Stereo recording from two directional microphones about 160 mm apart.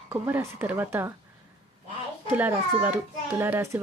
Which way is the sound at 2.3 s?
10° right (ahead or behind).